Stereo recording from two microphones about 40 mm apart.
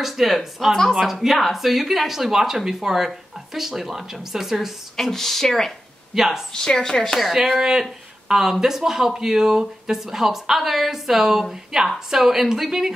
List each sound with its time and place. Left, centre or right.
0.0 s speech: centre
5.1 s speech: centre
6.1 s speech: centre
6.5 s speech: centre
7.2 s speech: centre